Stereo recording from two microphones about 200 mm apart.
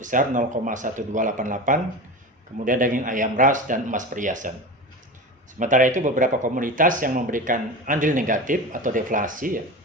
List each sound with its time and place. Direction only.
0.0 s speech: 40° right (ahead or behind)
5.5 s speech: 40° right (ahead or behind)